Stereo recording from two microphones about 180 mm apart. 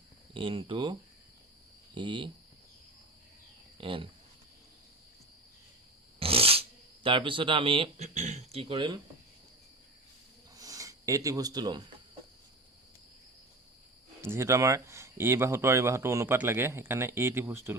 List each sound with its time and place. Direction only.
0.3 s speech: 30° right (ahead or behind)
2.0 s speech: 25° right (ahead or behind)
3.8 s speech: 30° right (ahead or behind)
6.1 s speech: 30° right (ahead or behind)
10.5 s a sound: 20° right (ahead or behind)
14.2 s speech: 15° right (ahead or behind)